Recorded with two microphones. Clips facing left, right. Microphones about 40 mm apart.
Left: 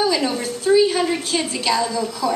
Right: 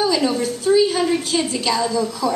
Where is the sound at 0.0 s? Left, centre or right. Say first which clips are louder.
Right 1 dB; centre.